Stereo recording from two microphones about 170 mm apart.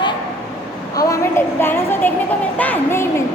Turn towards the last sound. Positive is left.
turn(degrees=10)  # may be behind; listen again after turning